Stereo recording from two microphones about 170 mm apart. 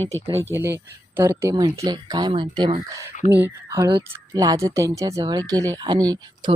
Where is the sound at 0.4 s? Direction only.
15° right (ahead or behind).